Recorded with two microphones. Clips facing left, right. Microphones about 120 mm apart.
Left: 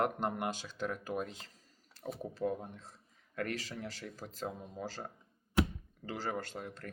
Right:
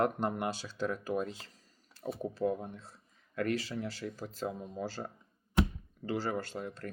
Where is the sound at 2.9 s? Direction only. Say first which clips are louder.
Right 3 dB; 40° left (ahead or behind).